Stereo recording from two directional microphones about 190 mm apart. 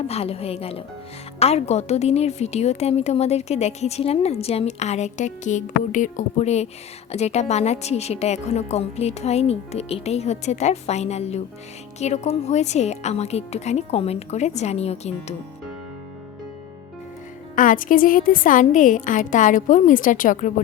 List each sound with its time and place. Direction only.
0.1 s a woman's voice: 30° left (ahead or behind)
17.5 s a woman's voice: 45° left (ahead or behind)